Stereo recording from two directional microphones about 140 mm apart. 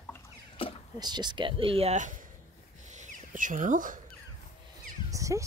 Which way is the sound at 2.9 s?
60° right (ahead or behind).